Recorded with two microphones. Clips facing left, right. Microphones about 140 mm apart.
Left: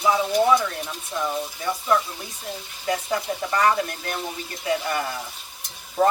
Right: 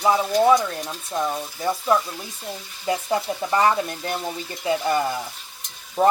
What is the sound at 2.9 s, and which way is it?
Speech, 25° right (ahead or behind).